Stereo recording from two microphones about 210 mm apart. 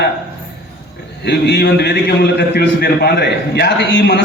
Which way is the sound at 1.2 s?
55° left (ahead or behind).